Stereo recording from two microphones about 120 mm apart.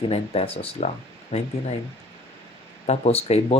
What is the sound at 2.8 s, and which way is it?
Speech, 60° left (ahead or behind).